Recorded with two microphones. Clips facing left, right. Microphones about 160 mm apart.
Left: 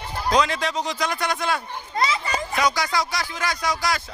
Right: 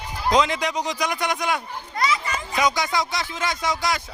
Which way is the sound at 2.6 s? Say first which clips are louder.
Right 2 dB; 20° right (ahead or behind).